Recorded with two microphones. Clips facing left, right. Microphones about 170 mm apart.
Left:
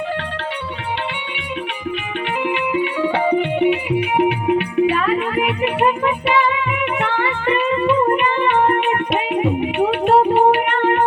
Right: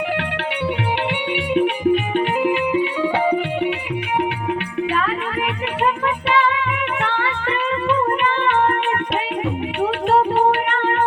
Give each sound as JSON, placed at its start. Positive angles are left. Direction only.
{"t": 1.5, "sound": "music", "side_deg": -45}
{"t": 3.0, "sound": "music", "side_deg": -5}
{"t": 4.2, "sound": "music", "side_deg": 15}